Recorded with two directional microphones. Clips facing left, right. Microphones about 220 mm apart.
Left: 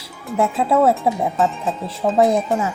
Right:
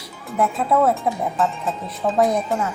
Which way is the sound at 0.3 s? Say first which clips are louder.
Left 2 dB; 25° left (ahead or behind).